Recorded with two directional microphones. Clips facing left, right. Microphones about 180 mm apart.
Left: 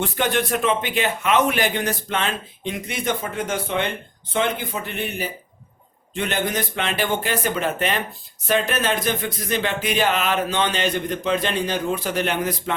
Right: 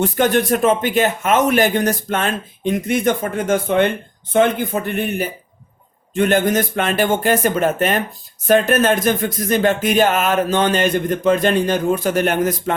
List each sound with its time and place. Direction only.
0.0 s a man's voice: 45° right (ahead or behind)